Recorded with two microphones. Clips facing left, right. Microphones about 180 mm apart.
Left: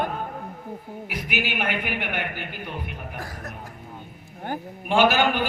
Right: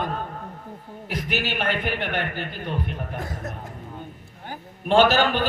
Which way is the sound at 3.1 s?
20° right (ahead or behind).